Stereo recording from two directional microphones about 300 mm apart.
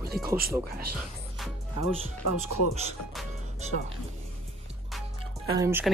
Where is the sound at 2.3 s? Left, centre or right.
Left.